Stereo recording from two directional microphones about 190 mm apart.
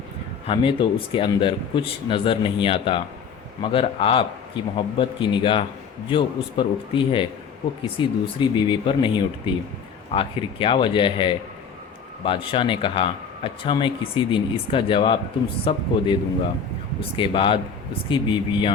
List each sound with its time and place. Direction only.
0.4 s speech: 25° left (ahead or behind)
17.0 s speech: 25° left (ahead or behind)